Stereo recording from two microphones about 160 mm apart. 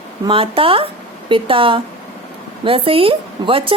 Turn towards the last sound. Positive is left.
turn(degrees=-35)  # may be behind; listen again after turning